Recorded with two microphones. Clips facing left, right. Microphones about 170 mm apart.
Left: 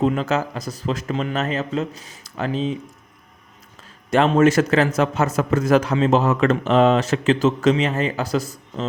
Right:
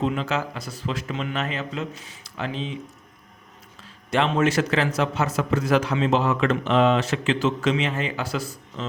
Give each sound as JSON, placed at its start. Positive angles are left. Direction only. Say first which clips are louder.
{"t": 0.0, "sound": "a man's voice", "louder": "left 5 dB", "side_deg": 45}
{"t": 4.1, "sound": "a man's voice", "louder": "left 6 dB", "side_deg": 45}